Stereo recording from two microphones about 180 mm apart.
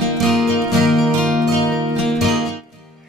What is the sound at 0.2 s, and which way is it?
Music, centre (ahead or behind).